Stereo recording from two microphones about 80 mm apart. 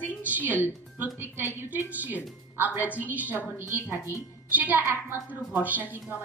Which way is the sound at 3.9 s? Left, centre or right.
Left.